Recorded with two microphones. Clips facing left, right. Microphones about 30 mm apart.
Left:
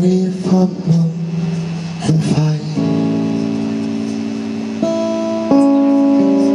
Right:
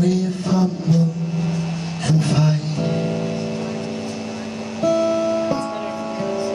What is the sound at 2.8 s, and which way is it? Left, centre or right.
Music, centre.